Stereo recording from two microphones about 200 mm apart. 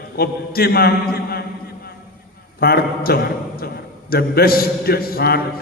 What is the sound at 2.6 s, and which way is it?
A man's voice, 50° left (ahead or behind).